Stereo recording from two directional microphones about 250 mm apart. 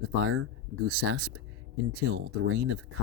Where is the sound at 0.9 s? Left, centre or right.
Right.